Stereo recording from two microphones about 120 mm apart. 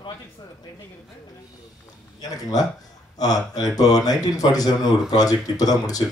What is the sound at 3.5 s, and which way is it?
Speech, 30° left (ahead or behind).